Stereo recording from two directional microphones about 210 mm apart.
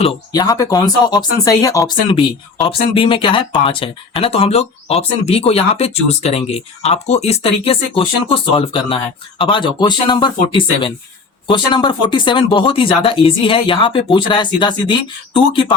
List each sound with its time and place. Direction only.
0.0 s speech: 20° left (ahead or behind)